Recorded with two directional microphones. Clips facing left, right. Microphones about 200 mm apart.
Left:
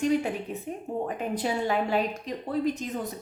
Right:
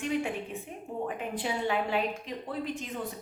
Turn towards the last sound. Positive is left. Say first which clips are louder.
# left 6 dB
turn(degrees=40)  # may be behind; listen again after turning